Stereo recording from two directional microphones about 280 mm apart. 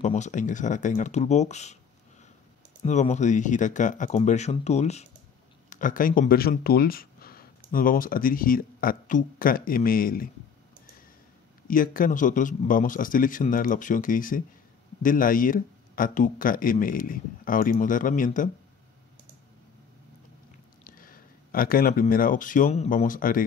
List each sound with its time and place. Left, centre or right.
0.0 s speech: left
2.8 s speech: left
11.6 s speech: left
20.8 s speech: left